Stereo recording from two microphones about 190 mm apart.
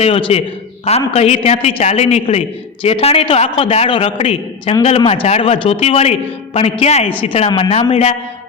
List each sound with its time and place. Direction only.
0.0 s a man's voice: 30° left (ahead or behind)